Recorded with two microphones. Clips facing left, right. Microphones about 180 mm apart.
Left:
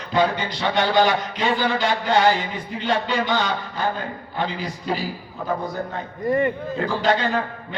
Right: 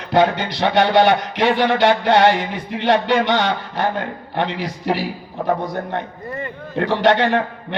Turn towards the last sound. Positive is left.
turn(degrees=-70)  # may be behind; listen again after turning